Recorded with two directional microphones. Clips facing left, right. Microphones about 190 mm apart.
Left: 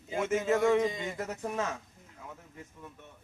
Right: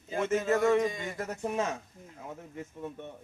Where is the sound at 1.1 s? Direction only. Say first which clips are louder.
Even; 5° left (ahead or behind).